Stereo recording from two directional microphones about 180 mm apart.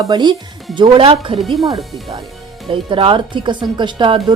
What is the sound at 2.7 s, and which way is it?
Music, 30° right (ahead or behind).